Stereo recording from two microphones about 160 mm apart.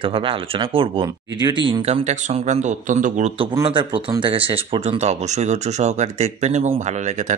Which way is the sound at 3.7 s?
35° right (ahead or behind).